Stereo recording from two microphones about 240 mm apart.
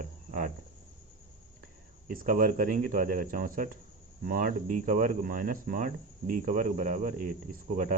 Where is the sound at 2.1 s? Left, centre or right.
Right.